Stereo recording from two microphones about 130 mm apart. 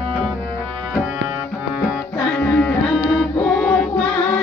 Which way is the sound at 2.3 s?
10° left (ahead or behind).